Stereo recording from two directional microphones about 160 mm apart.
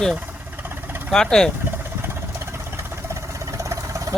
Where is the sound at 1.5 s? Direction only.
15° right (ahead or behind).